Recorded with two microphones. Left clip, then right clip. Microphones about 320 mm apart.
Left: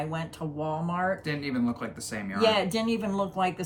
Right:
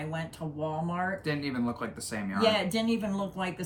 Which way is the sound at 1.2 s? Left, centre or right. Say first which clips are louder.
Left 1 dB; centre.